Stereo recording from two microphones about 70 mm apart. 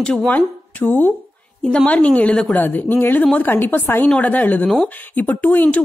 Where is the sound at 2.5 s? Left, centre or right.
Left.